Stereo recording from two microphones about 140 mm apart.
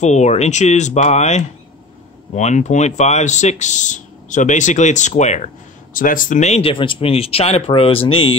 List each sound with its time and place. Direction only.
0.0 s speech: 55° left (ahead or behind)
5.9 s speech: 75° left (ahead or behind); by 8.3 s 40° left (ahead or behind)